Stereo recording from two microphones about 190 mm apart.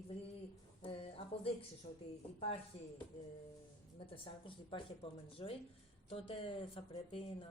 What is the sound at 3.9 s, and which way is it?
Speech, 30° left (ahead or behind).